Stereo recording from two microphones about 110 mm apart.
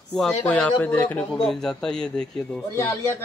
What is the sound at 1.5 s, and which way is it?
Speech, 5° left (ahead or behind).